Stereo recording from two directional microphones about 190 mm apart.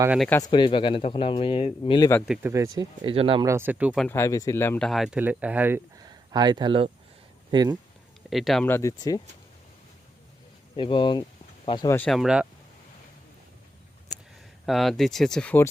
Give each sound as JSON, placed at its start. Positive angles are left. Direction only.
{"t": 0.2, "sound": "speech", "side_deg": 10}
{"t": 0.4, "sound": "speech", "side_deg": 25}
{"t": 2.2, "sound": "speech", "side_deg": -5}
{"t": 2.7, "sound": "speech", "side_deg": -25}
{"t": 3.4, "sound": "speech", "side_deg": -15}
{"t": 3.9, "sound": "speech", "side_deg": 10}
{"t": 4.9, "sound": "speech", "side_deg": 0}
{"t": 6.3, "sound": "speech", "side_deg": -20}
{"t": 8.3, "sound": "speech", "side_deg": 0}
{"t": 10.8, "sound": "speech", "side_deg": 25}
{"t": 11.9, "sound": "speech", "side_deg": 0}
{"t": 14.7, "sound": "speech", "side_deg": 0}